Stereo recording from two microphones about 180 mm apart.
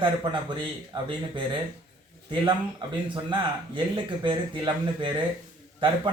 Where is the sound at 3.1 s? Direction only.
25° right (ahead or behind).